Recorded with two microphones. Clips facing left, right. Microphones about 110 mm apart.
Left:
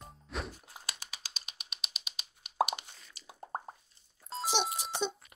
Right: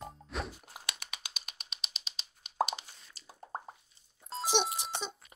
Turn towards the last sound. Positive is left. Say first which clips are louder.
# left 3 dB
turn(degrees=0)  # may be behind; listen again after turning